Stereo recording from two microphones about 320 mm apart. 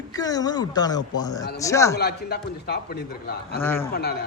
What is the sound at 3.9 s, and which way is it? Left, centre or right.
Speech, left.